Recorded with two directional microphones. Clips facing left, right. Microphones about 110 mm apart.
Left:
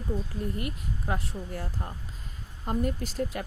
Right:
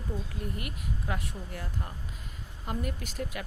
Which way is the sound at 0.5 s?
35° left (ahead or behind).